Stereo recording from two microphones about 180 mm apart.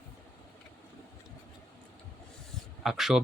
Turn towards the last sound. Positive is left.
turn(degrees=0)  # may be behind; listen again after turning